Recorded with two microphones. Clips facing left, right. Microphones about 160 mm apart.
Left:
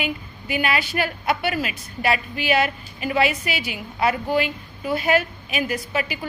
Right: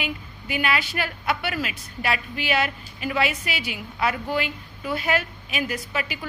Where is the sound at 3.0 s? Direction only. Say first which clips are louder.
Left 4 dB; 45° left (ahead or behind).